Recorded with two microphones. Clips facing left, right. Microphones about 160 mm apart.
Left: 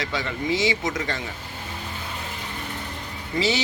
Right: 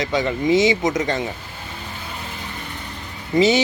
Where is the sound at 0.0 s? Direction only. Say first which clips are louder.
Right 7 dB; 20° right (ahead or behind).